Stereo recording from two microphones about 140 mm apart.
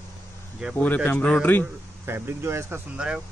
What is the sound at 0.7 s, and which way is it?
Speech, 10° left (ahead or behind).